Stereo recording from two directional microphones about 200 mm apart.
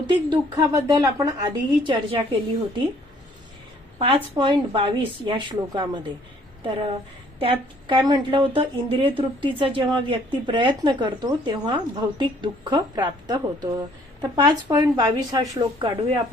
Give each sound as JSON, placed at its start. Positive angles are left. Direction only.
{"t": 0.1, "sound": "a woman's voice", "side_deg": -20}
{"t": 3.9, "sound": "a woman's voice", "side_deg": -25}